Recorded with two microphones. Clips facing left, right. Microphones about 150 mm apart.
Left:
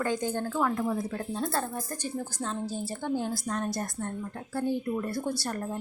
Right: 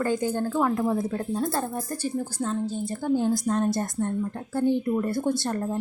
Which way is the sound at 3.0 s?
20° right (ahead or behind).